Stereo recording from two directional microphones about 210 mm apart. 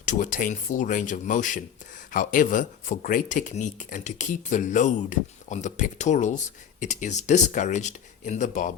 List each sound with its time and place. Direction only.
0.0 s speech: 40° left (ahead or behind)